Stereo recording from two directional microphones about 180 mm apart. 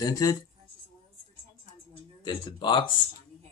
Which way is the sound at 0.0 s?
20° left (ahead or behind).